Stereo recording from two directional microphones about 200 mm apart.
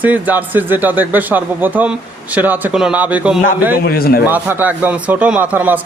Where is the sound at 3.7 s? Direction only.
50° left (ahead or behind).